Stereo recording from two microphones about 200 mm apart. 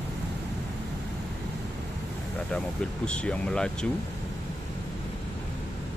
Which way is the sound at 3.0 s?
5° left (ahead or behind).